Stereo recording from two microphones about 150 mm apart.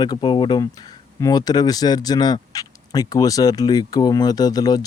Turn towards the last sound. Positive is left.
turn(degrees=25)  # may be behind; listen again after turning